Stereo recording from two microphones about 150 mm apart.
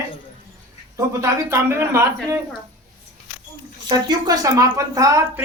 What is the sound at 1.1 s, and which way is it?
Speech, 20° right (ahead or behind).